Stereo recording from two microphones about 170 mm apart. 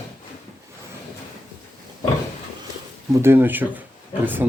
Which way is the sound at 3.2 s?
10° right (ahead or behind).